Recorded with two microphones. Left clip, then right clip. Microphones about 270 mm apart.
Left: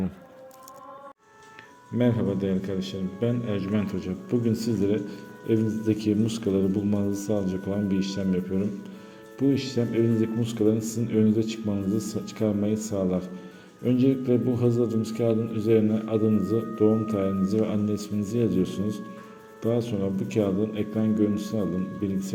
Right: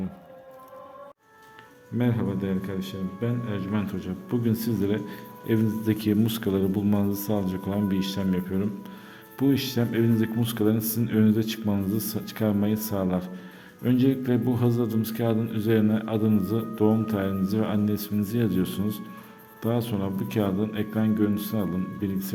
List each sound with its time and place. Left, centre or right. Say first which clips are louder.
2.0 s a man's voice: left 3 dB; centre